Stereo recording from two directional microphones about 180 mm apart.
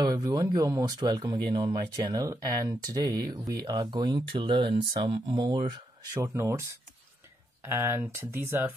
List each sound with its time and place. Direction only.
0.0 s speech: 20° right (ahead or behind)
7.6 s speech: 15° right (ahead or behind)